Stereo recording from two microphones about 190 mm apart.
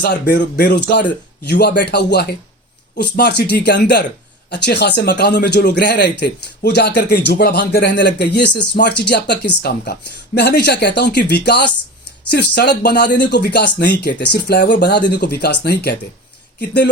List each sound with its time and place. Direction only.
0.0 s speech: 60° left (ahead or behind)